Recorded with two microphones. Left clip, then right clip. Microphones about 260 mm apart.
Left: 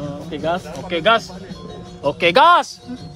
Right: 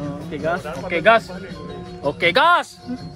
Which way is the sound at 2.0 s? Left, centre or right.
Left.